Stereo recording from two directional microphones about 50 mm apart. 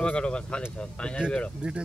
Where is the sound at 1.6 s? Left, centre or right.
Right.